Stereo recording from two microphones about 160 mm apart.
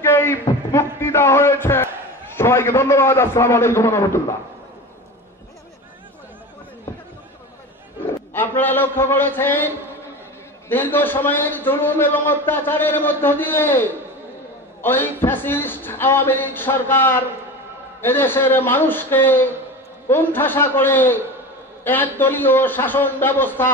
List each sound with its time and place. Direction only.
0.0 s a sound: 15° left (ahead or behind)
2.3 s a man's voice: 15° left (ahead or behind)
8.3 s a man's voice: 10° left (ahead or behind)
10.7 s a man's voice: 15° left (ahead or behind)